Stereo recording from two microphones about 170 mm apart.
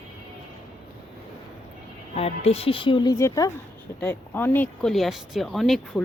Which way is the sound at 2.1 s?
35° left (ahead or behind).